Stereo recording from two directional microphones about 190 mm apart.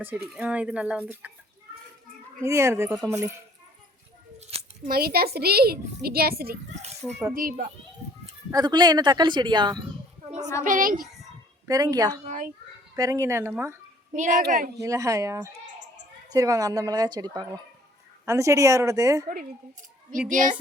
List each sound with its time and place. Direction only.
0.0 s speech: 10° right (ahead or behind)
2.4 s speech: 15° right (ahead or behind)
4.5 s a sound: 30° right (ahead or behind)
4.9 s a child's voice: 55° right (ahead or behind)
7.0 s a child's voice: 5° left (ahead or behind)
7.3 s a child's voice: 50° right (ahead or behind)
8.5 s speech: 20° right (ahead or behind)
10.6 s a child's voice: 45° right (ahead or behind)
11.7 s speech: 20° right (ahead or behind)
12.2 s a child's voice: 40° right (ahead or behind)
13.0 s speech: 15° right (ahead or behind)
14.1 s a child's voice: 40° right (ahead or behind)
14.8 s speech: 15° right (ahead or behind)
20.1 s a child's voice: 45° right (ahead or behind)